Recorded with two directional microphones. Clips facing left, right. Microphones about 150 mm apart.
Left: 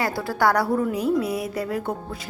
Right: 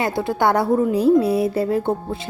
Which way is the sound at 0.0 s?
20° right (ahead or behind).